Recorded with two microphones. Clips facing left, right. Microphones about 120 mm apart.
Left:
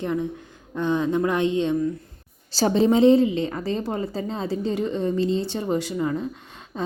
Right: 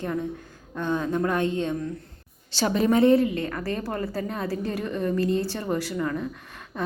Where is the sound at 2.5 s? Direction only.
30° left (ahead or behind).